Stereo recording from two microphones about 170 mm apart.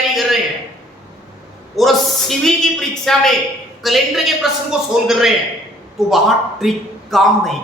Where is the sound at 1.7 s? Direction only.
Centre (ahead or behind).